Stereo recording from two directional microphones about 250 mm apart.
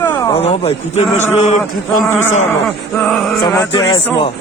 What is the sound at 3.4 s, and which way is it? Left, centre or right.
Speech, centre.